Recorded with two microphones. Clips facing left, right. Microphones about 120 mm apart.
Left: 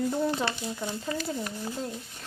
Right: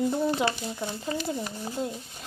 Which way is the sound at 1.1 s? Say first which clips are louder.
Right 1 dB; 25° right (ahead or behind).